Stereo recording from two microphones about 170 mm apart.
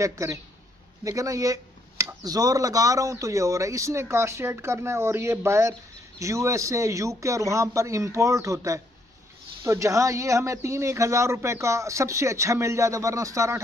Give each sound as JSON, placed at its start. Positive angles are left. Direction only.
{"t": 0.0, "sound": "speech", "side_deg": -20}